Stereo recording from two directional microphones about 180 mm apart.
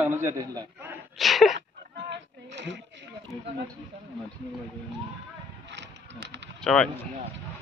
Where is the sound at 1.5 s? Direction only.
75° right (ahead or behind).